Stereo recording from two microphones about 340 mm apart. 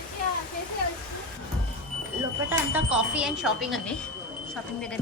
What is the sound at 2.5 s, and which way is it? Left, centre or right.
Speech, centre.